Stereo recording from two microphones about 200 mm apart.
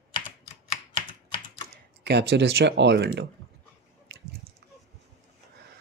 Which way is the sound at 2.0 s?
55° right (ahead or behind).